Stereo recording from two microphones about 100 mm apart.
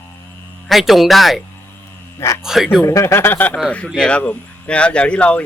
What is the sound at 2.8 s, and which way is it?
Speech, 30° left (ahead or behind).